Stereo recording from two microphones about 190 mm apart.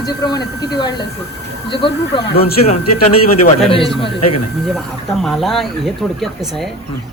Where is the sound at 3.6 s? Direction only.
30° left (ahead or behind).